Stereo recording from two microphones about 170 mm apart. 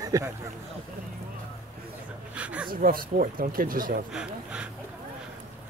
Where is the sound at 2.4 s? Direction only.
5° right (ahead or behind).